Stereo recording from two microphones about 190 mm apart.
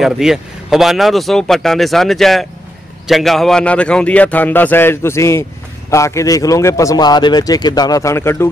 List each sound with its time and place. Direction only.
0.0 s a man's voice: centre (ahead or behind); by 8.5 s 15° left (ahead or behind)